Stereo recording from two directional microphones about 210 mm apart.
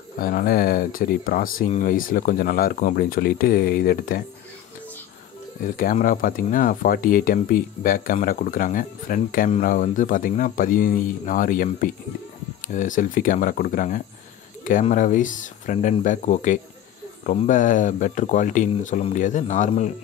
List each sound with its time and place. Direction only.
0.2 s speech: 45° left (ahead or behind)
5.6 s speech: 40° left (ahead or behind)